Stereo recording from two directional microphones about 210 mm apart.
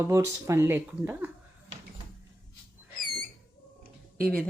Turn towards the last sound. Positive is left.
turn(degrees=5)  # may be behind; listen again after turning